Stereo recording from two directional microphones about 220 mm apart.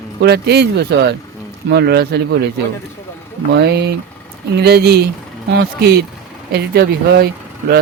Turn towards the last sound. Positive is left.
turn(degrees=-45)  # may be behind; listen again after turning